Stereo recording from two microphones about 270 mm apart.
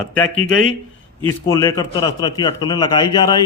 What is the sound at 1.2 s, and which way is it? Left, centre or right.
A man's voice, centre.